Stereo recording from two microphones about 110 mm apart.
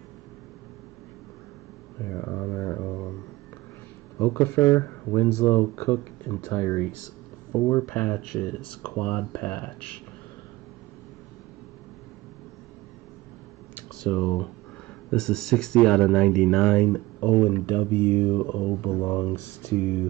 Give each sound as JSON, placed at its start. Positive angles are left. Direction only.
{"t": 2.0, "sound": "mantra", "side_deg": 20}
{"t": 4.2, "sound": "speech", "side_deg": 25}
{"t": 7.9, "sound": "speech", "side_deg": 10}
{"t": 13.7, "sound": "a sound", "side_deg": 10}
{"t": 15.0, "sound": "speech", "side_deg": 5}